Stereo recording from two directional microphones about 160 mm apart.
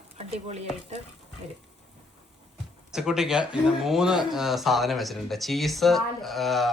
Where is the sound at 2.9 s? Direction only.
5° right (ahead or behind).